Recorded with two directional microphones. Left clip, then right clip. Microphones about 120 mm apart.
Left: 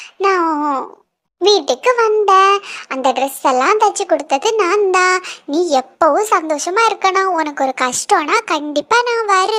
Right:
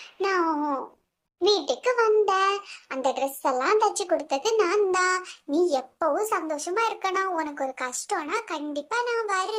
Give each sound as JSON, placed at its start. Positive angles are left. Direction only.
{"t": 0.2, "sound": "babbling", "side_deg": 50}
{"t": 1.4, "sound": "a child's voice", "side_deg": 45}